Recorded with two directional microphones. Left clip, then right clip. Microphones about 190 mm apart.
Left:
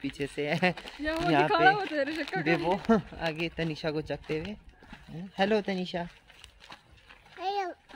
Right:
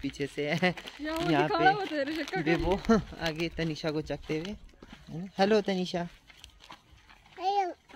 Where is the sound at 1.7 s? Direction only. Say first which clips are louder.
Left 2 dB; centre (ahead or behind).